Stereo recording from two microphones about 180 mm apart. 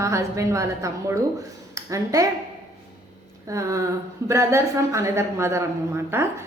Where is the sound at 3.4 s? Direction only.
15° right (ahead or behind).